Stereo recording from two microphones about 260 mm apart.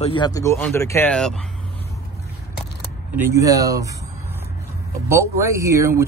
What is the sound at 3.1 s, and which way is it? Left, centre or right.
Speech, centre.